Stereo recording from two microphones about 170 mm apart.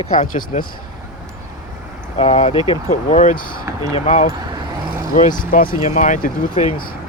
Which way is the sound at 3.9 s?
45° left (ahead or behind).